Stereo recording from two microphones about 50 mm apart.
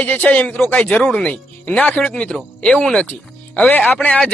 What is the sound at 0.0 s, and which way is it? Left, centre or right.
A man's voice, left.